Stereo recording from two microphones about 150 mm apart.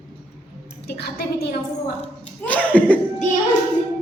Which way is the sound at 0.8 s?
90° left.